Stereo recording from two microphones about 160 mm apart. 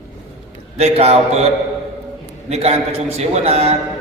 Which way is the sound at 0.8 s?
40° right (ahead or behind).